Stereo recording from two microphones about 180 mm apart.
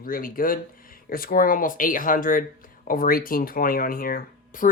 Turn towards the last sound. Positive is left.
turn(degrees=50)  # may be behind; listen again after turning